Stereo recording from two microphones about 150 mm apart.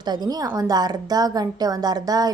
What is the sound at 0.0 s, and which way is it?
A woman's voice, 30° right (ahead or behind).